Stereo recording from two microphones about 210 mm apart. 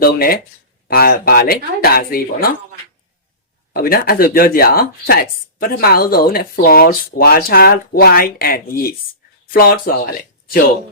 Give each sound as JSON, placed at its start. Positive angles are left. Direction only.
{"t": 0.0, "sound": "speech", "side_deg": 45}
{"t": 3.7, "sound": "speech", "side_deg": 45}